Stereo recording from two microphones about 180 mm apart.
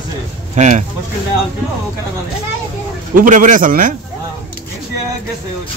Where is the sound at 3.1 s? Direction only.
45° right (ahead or behind).